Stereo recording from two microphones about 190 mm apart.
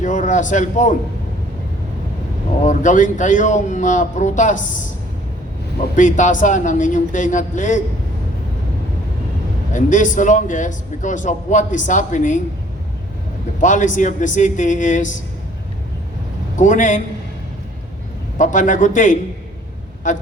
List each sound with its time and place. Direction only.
0.0 s a man's voice: 40° left (ahead or behind)
2.6 s a man's voice: 40° left (ahead or behind)
6.0 s a man's voice: 40° left (ahead or behind)
9.7 s a man's voice: 40° left (ahead or behind)
13.6 s a man's voice: 40° left (ahead or behind)
16.6 s a man's voice: 40° left (ahead or behind)
18.3 s a man's voice: 40° left (ahead or behind)